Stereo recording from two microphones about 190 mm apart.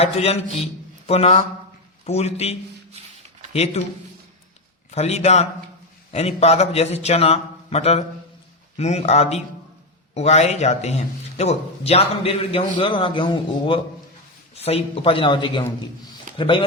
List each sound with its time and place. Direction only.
0.0 s a man's voice: 35° left (ahead or behind)
4.9 s a man's voice: 35° left (ahead or behind)